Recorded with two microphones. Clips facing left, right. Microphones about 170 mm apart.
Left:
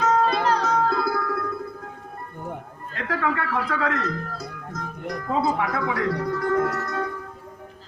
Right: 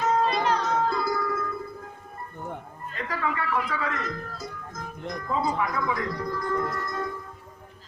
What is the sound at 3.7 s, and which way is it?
Speech, 70° left (ahead or behind).